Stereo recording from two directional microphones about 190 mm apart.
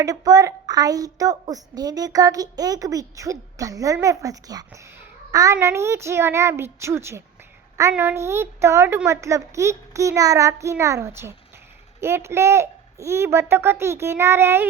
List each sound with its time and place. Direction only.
0.0 s a woman's voice: 20° right (ahead or behind)